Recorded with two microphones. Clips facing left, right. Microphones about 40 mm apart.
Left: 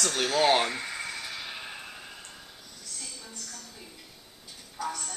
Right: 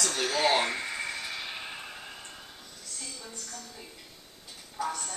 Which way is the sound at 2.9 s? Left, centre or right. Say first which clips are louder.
Right 1 dB; centre.